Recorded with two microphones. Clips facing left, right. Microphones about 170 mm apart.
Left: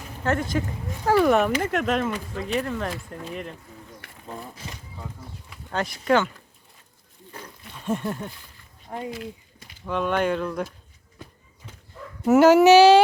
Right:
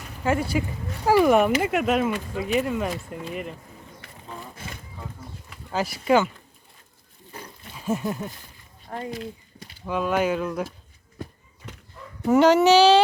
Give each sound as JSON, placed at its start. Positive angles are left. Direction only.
{"t": 0.3, "sound": "speech", "side_deg": -10}
{"t": 5.7, "sound": "speech", "side_deg": -5}
{"t": 7.7, "sound": "speech", "side_deg": -5}
{"t": 8.9, "sound": "speech", "side_deg": 10}
{"t": 9.1, "sound": "a sound", "side_deg": -35}
{"t": 9.8, "sound": "speech", "side_deg": -5}
{"t": 12.2, "sound": "speech", "side_deg": 5}